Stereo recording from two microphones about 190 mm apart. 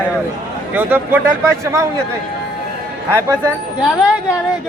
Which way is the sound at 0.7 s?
10° right (ahead or behind).